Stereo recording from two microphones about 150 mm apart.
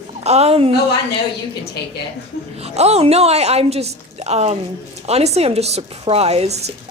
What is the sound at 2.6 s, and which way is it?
Speech, 45° right (ahead or behind).